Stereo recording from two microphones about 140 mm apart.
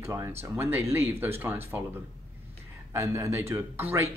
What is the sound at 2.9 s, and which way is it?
Speech, 20° right (ahead or behind).